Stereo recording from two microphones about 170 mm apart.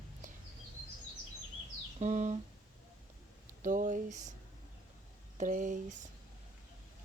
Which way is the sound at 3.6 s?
50° right (ahead or behind).